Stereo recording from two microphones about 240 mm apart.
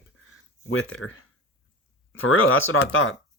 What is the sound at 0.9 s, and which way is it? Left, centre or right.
Speech, left.